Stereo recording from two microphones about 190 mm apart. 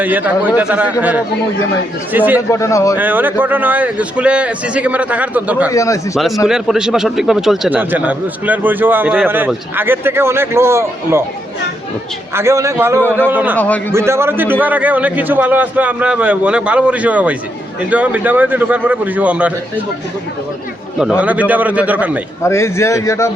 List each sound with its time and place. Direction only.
0.0 s a man's voice: 10° right (ahead or behind)
2.5 s speech: 15° left (ahead or behind)
2.9 s a man's voice: 10° right (ahead or behind)
5.7 s speech: 15° left (ahead or behind)
6.1 s a man's voice: centre (ahead or behind)
12.3 s a man's voice: 15° right (ahead or behind)
21.2 s a man's voice: 5° right (ahead or behind)
22.4 s speech: 15° left (ahead or behind)